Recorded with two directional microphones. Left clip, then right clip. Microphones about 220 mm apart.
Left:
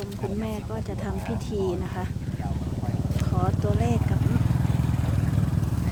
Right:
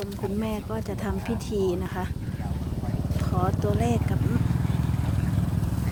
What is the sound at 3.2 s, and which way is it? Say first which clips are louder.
Speech: right 2 dB; 20° right (ahead or behind).